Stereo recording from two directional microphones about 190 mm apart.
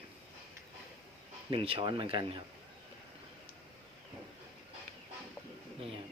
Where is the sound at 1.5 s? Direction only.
25° right (ahead or behind).